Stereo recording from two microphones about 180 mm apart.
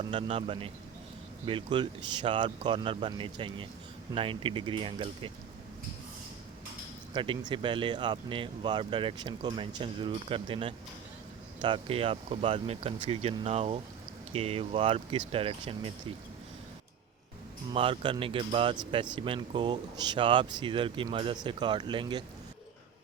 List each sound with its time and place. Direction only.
0.0 s speech: 30° right (ahead or behind)
7.1 s speech: 25° right (ahead or behind)
17.7 s speech: 30° right (ahead or behind)